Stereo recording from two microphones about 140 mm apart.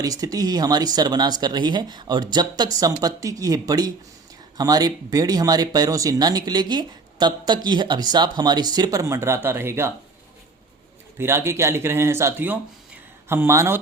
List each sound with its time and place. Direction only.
0.0 s speech: 25° right (ahead or behind)
11.2 s speech: 20° right (ahead or behind)